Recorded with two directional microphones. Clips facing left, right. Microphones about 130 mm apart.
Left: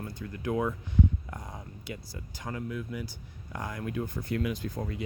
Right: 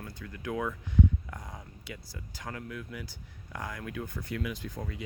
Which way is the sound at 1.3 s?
25° left (ahead or behind).